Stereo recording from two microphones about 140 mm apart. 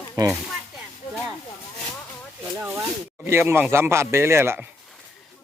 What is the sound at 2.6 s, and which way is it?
A man's voice, 20° right (ahead or behind).